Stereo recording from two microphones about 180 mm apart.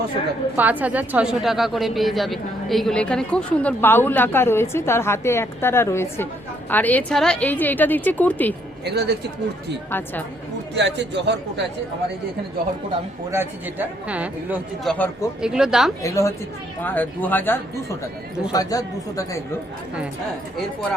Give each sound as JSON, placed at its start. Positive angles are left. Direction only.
{"t": 0.5, "sound": "a woman's voice", "side_deg": -10}
{"t": 8.8, "sound": "speech", "side_deg": -65}
{"t": 10.8, "sound": "speech", "side_deg": -75}
{"t": 13.3, "sound": "a woman's voice", "side_deg": -10}
{"t": 14.9, "sound": "a woman's voice", "side_deg": 10}
{"t": 15.4, "sound": "speech", "side_deg": -5}
{"t": 16.0, "sound": "a woman's voice", "side_deg": 15}